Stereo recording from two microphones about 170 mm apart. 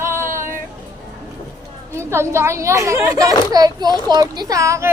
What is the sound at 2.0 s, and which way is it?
Speech, 15° right (ahead or behind).